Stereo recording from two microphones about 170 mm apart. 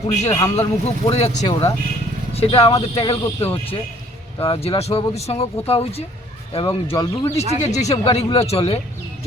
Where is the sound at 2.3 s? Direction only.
35° left (ahead or behind).